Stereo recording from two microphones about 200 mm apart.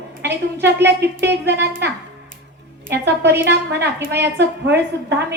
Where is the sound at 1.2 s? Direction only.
55° right (ahead or behind).